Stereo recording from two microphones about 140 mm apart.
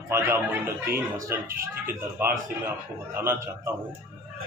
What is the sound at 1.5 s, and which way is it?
Speech, 90° right.